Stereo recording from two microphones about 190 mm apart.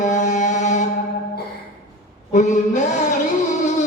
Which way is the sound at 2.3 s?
40° left (ahead or behind).